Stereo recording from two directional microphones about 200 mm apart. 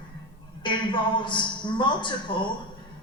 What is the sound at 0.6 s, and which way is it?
A man's voice, 25° left (ahead or behind).